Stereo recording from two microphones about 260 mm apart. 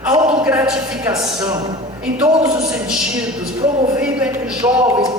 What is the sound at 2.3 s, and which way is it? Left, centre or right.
Speech, right.